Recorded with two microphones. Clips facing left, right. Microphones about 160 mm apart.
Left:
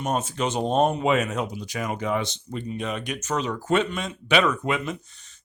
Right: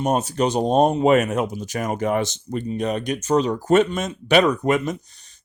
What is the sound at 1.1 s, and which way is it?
Speech, 50° right (ahead or behind).